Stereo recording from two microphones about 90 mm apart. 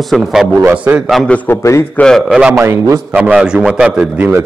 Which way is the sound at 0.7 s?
15° right (ahead or behind).